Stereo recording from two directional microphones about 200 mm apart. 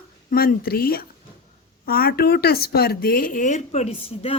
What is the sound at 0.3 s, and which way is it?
Speech, 50° left (ahead or behind).